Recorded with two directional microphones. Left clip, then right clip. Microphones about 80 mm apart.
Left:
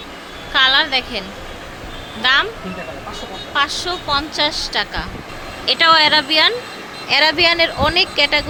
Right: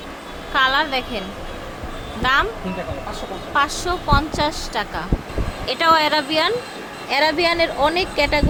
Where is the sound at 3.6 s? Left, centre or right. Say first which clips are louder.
Left 1 dB; right.